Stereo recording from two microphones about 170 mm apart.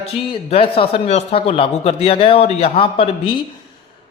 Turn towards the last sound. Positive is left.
turn(degrees=30)  # may be behind; listen again after turning